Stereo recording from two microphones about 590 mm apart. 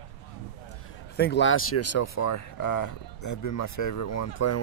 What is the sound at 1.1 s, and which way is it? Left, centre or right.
Speech, centre.